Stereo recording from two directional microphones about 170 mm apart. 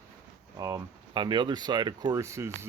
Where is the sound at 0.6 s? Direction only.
20° right (ahead or behind).